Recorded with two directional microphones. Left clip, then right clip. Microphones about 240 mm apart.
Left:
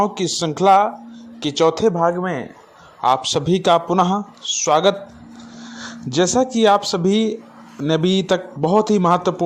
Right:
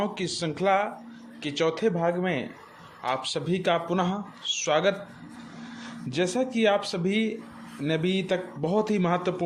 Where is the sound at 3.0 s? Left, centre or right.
Left.